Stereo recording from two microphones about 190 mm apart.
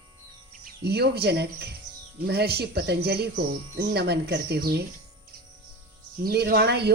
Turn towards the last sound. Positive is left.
turn(degrees=-60)  # may be behind; listen again after turning